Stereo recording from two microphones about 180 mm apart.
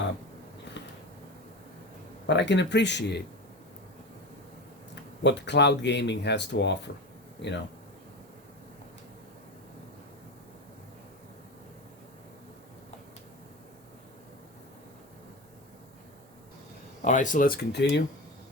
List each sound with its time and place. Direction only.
2.2 s speech: 75° left (ahead or behind)
5.2 s speech: 70° left (ahead or behind)
17.0 s speech: 45° left (ahead or behind); by 18.0 s 70° left (ahead or behind)